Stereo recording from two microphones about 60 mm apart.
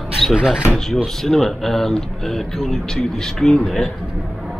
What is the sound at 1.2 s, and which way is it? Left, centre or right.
Speech, centre.